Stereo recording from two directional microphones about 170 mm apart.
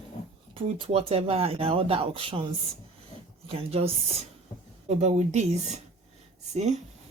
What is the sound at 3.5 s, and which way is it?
Speech, 35° right (ahead or behind).